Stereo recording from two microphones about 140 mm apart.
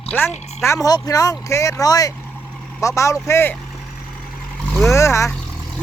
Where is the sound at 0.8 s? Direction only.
25° left (ahead or behind).